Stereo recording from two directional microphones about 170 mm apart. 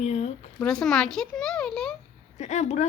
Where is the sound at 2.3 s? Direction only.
45° left (ahead or behind).